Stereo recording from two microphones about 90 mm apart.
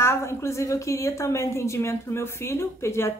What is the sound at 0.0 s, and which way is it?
Speech, 30° left (ahead or behind).